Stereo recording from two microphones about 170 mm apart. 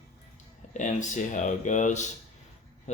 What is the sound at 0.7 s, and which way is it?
Speech, 45° left (ahead or behind).